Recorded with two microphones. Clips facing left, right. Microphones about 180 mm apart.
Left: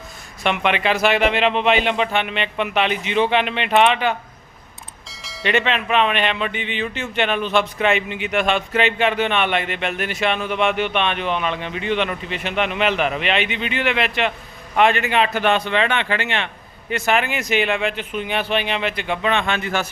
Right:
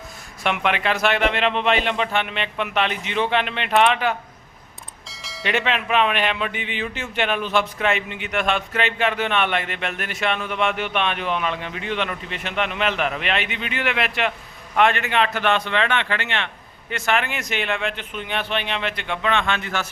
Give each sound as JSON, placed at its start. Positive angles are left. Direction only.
{"t": 0.4, "sound": "bell", "side_deg": 0}